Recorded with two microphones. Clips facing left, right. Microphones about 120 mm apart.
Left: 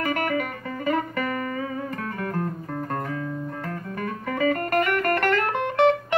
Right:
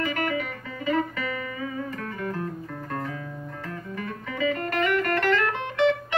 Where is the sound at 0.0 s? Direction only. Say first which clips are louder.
Left 2 dB; 50° left (ahead or behind).